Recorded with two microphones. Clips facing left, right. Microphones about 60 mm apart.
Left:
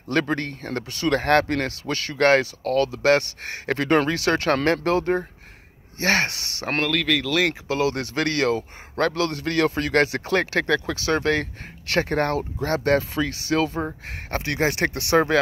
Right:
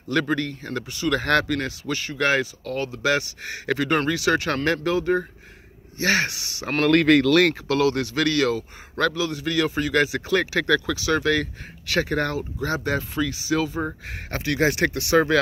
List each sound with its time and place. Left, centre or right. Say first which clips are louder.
0.1 s speech: even; left
3.0 s a man's voice: left 4 dB; left
6.9 s speech: right 9 dB; centre
7.2 s speech: right 5 dB; centre
7.6 s a man's voice: right 2 dB; left
9.1 s speech: left 1 dB; left
12.6 s speech: left 5 dB; left
14.3 s a man's voice: right 1 dB; left